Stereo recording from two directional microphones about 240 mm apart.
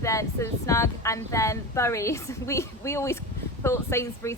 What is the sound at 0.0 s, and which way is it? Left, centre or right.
Speech, centre.